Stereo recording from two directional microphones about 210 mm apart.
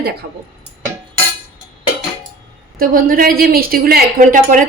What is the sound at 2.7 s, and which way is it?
Speech, 40° right (ahead or behind).